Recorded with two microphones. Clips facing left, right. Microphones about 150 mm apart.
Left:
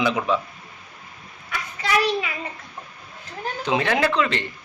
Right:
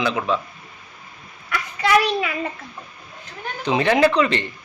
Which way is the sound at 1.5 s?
65° right (ahead or behind).